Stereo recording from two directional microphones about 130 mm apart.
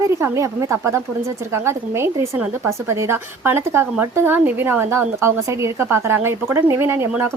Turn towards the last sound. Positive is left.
turn(degrees=-15)  # may be behind; listen again after turning